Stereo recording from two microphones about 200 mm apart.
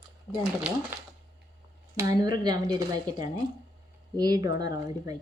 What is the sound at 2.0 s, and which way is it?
A woman's voice, 15° right (ahead or behind).